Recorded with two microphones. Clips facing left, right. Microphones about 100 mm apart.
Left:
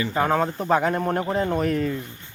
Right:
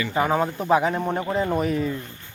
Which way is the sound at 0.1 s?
10° right (ahead or behind).